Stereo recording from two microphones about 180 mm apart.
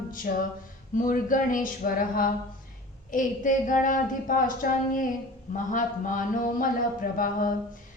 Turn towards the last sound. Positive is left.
turn(degrees=50)  # may be behind; listen again after turning